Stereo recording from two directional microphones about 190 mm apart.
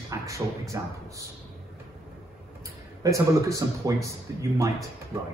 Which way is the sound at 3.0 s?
15° right (ahead or behind).